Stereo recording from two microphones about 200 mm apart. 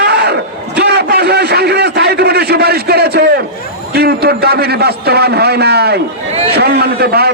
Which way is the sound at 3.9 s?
55° right (ahead or behind).